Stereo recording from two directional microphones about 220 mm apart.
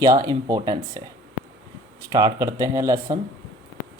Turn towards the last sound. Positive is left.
turn(degrees=-15)  # may be behind; listen again after turning